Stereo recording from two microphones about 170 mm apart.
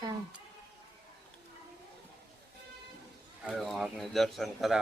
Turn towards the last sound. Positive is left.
turn(degrees=0)  # may be behind; listen again after turning